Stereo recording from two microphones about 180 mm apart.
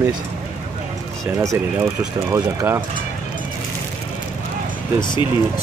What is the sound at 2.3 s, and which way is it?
Speech, 15° right (ahead or behind).